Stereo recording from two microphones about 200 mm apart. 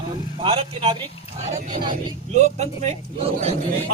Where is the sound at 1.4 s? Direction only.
35° right (ahead or behind).